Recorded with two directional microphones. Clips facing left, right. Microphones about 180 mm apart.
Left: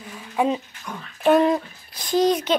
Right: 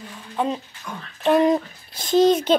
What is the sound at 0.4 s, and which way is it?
Speech, 10° left (ahead or behind).